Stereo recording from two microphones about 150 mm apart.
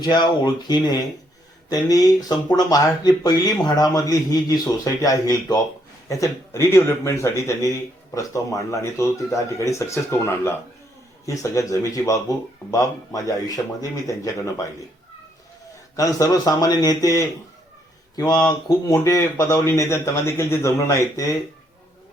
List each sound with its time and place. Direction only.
0.0 s a man's voice: 30° left (ahead or behind)
16.0 s a man's voice: 25° left (ahead or behind)
18.9 s a man's voice: 20° left (ahead or behind)